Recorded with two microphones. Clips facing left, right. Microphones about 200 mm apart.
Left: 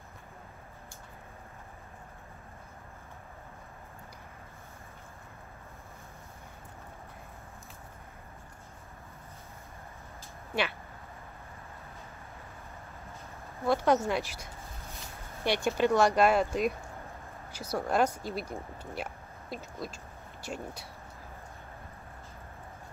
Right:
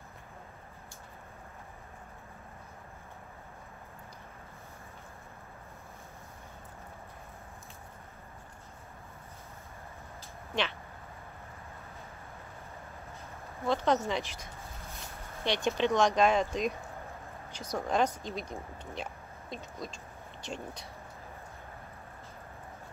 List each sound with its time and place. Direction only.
13.7 s speech: 10° left (ahead or behind)